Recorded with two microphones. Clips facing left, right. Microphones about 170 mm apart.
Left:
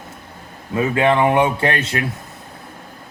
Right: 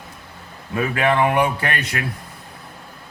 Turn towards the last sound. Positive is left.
turn(degrees=25)  # may be behind; listen again after turning